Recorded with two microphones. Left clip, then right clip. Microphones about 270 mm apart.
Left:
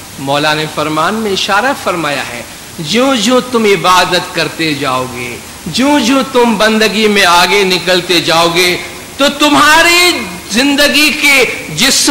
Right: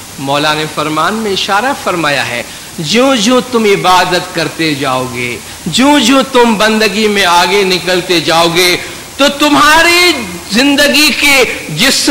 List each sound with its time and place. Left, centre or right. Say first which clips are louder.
0.3 s a man's voice: even; centre
2.0 s a woman's voice: right 4 dB; right
6.8 s a man's voice: left 1 dB; centre; by 11.4 s right
11.7 s a man's voice: right 1 dB; centre